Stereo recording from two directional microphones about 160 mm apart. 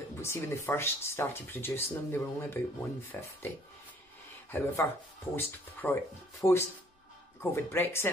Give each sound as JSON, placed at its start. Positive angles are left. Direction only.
{"t": 0.2, "sound": "speech", "side_deg": 15}